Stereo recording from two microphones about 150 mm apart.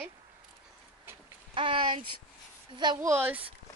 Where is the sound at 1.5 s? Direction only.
35° right (ahead or behind); by 3.5 s 10° right (ahead or behind).